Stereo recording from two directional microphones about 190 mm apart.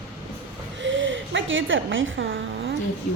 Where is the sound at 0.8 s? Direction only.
80° right.